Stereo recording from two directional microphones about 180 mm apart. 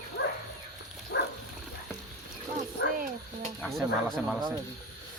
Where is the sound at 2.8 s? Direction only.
65° left (ahead or behind).